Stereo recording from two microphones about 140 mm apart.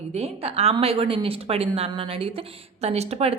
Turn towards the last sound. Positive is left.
turn(degrees=-50)  # may be behind; listen again after turning